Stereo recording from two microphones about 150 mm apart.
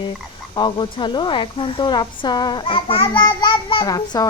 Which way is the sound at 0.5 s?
30° left (ahead or behind).